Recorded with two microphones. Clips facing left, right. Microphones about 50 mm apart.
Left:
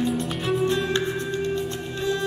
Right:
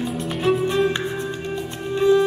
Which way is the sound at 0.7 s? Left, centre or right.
Centre.